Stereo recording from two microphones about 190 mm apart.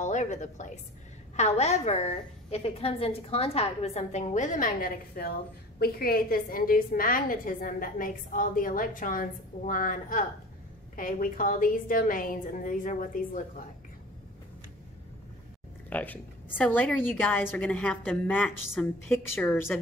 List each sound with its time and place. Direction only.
0.0 s a woman's voice: 40° left (ahead or behind)
15.9 s a woman's voice: 10° left (ahead or behind)